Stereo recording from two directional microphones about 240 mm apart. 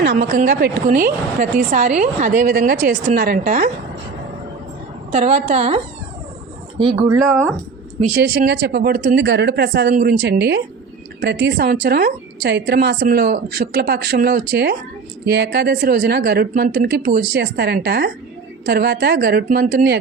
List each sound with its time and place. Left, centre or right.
0.0 s a woman's voice: right
5.1 s a woman's voice: right
8.0 s a woman's voice: right
9.2 s a woman's voice: right